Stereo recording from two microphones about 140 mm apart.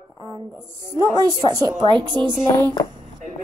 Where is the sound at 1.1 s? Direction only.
25° right (ahead or behind).